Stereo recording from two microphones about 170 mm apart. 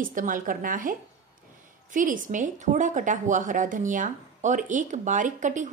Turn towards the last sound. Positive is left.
turn(degrees=-45)  # may be behind; listen again after turning